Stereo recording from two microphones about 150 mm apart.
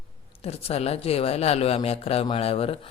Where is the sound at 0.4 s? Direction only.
45° left (ahead or behind).